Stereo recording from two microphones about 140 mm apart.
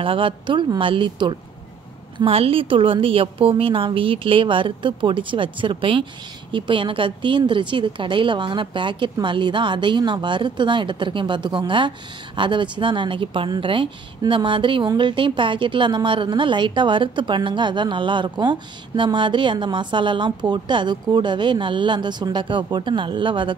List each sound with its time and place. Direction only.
0.0 s a woman's voice: 40° right (ahead or behind)